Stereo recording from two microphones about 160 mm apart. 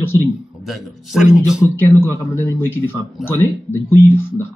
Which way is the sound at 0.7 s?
5° right (ahead or behind).